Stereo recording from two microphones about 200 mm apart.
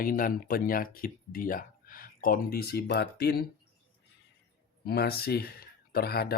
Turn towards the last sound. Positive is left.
turn(degrees=50)  # may be behind; listen again after turning